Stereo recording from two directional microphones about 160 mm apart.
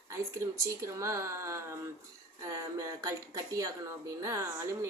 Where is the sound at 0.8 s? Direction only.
20° right (ahead or behind).